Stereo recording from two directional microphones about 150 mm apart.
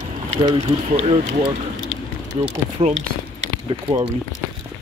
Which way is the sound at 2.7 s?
50° right (ahead or behind).